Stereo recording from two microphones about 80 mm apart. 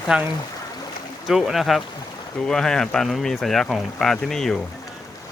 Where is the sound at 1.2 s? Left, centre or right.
Centre.